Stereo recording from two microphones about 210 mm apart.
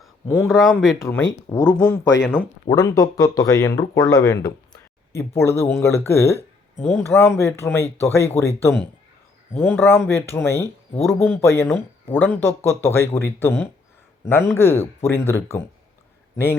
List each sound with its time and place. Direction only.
0.4 s speech: centre (ahead or behind)
0.9 s a man's voice: 15° left (ahead or behind)